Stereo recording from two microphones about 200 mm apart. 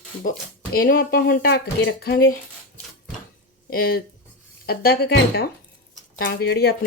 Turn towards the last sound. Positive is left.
turn(degrees=50)  # may be behind; listen again after turning